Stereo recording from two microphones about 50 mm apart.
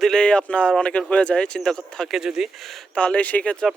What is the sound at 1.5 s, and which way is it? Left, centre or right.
Speech, centre.